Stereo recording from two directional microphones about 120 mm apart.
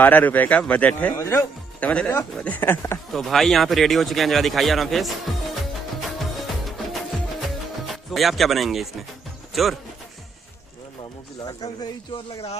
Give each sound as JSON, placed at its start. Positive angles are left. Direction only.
{"t": 0.0, "sound": "speech", "side_deg": 15}
{"t": 1.1, "sound": "speech", "side_deg": 25}
{"t": 1.8, "sound": "speech", "side_deg": 15}
{"t": 3.1, "sound": "a sound", "side_deg": 0}
{"t": 7.4, "sound": "music", "side_deg": 0}
{"t": 9.5, "sound": "speech", "side_deg": 0}
{"t": 11.4, "sound": "speech", "side_deg": 35}